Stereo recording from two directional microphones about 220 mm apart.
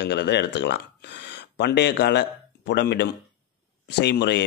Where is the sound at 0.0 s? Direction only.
50° left (ahead or behind).